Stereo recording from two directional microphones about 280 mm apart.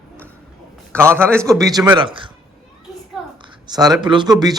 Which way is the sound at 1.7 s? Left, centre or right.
Centre.